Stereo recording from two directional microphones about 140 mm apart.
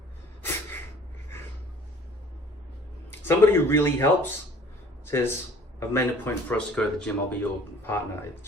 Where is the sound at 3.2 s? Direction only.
15° left (ahead or behind).